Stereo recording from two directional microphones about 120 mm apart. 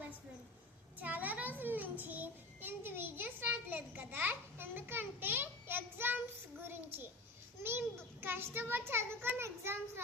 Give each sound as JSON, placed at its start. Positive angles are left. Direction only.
{"t": 0.9, "sound": "child singing", "side_deg": -15}
{"t": 6.6, "sound": "a child's voice", "side_deg": -20}
{"t": 7.6, "sound": "a sound", "side_deg": -20}
{"t": 8.2, "sound": "a child's voice", "side_deg": -20}